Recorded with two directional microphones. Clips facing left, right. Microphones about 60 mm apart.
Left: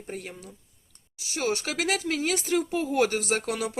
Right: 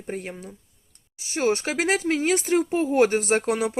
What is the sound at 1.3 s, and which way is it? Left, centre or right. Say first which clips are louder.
Speech: right 5 dB; right.